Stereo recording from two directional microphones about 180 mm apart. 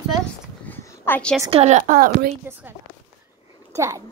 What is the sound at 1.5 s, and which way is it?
Speech, 40° right (ahead or behind).